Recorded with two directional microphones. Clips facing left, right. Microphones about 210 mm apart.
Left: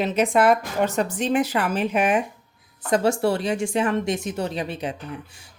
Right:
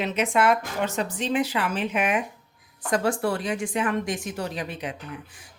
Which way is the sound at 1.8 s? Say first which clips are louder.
Left 5 dB; 35° left (ahead or behind).